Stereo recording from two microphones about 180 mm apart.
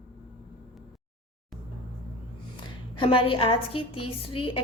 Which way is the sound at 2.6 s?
30° left (ahead or behind).